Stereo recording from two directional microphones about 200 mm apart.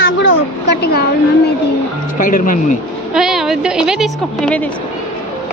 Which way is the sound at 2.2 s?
45° left (ahead or behind).